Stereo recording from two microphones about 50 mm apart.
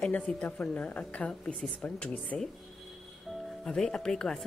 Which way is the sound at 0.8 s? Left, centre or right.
Left.